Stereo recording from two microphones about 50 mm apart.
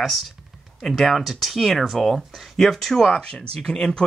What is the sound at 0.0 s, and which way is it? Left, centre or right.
Speech, centre.